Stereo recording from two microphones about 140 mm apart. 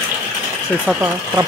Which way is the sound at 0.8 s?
15° right (ahead or behind).